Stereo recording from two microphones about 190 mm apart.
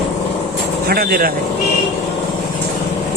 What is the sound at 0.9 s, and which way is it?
Speech, 55° right (ahead or behind).